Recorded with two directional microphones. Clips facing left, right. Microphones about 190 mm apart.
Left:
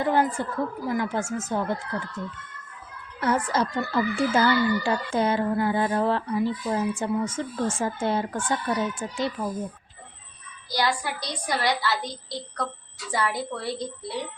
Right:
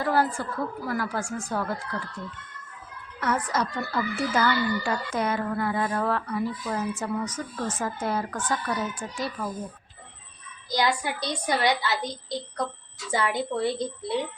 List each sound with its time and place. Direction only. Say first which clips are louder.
0.0 s speech: left 2 dB; 20° left (ahead or behind)
10.7 s a child's voice: right 1 dB; 20° right (ahead or behind)